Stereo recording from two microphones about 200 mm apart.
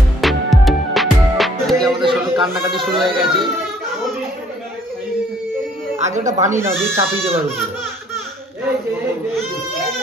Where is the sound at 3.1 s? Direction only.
25° right (ahead or behind).